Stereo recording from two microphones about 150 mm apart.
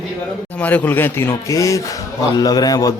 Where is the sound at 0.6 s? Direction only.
10° left (ahead or behind).